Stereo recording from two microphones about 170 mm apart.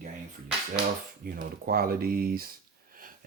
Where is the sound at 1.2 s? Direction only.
60° right (ahead or behind).